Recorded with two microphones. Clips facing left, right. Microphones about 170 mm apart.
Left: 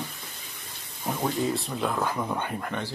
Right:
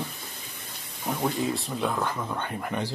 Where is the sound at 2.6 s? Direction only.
10° right (ahead or behind).